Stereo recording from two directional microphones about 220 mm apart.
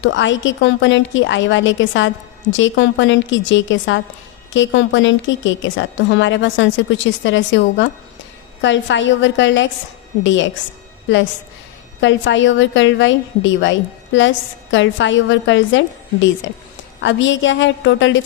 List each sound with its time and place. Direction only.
0.0 s a woman's voice: 55° left (ahead or behind)
11.9 s a woman's voice: 55° left (ahead or behind)